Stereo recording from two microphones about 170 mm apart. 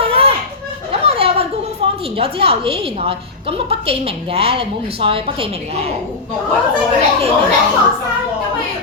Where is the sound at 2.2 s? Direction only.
35° right (ahead or behind).